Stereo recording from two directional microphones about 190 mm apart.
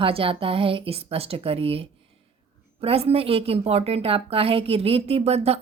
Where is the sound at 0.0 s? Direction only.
30° right (ahead or behind).